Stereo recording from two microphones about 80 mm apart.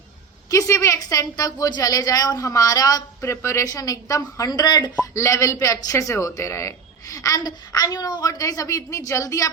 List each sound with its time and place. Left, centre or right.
0.5 s a man's voice: left
3.7 s a man's voice: left
5.1 s a man's voice: left